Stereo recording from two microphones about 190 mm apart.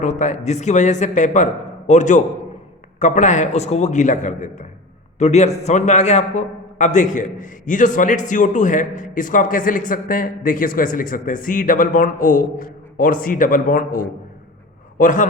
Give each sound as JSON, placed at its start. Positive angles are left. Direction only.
{"t": 0.0, "sound": "a man's voice", "side_deg": 40}